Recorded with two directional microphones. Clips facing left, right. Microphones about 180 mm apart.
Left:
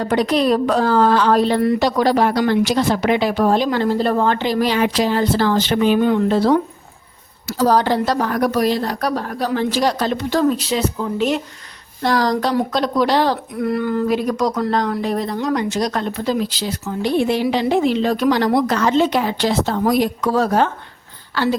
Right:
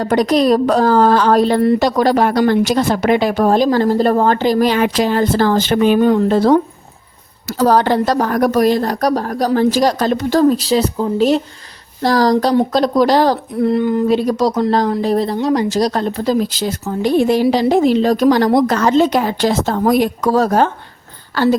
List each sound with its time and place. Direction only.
0.0 s speech: 40° right (ahead or behind)
7.4 s speech: 60° right (ahead or behind); by 13.7 s 40° right (ahead or behind)
13.7 s speech: 20° right (ahead or behind); by 21.5 s 40° right (ahead or behind)